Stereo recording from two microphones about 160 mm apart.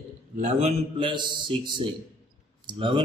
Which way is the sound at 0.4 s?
40° right (ahead or behind).